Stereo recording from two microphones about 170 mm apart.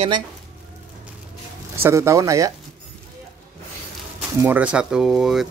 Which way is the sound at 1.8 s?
15° right (ahead or behind).